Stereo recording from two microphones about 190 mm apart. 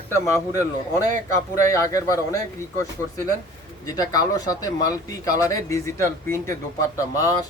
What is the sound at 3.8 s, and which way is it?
Speech, 20° left (ahead or behind).